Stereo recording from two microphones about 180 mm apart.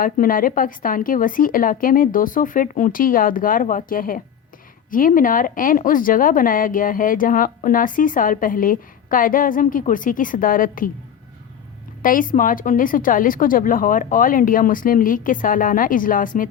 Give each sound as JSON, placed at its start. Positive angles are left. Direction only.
{"t": 0.0, "sound": "speech", "side_deg": 50}
{"t": 12.0, "sound": "speech", "side_deg": 50}